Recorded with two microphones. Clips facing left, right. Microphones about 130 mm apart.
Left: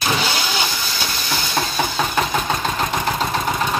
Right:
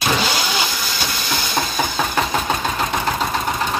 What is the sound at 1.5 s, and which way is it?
Music, 5° right (ahead or behind).